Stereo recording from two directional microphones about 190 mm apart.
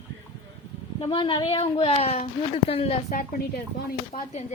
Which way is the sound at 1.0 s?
30° left (ahead or behind).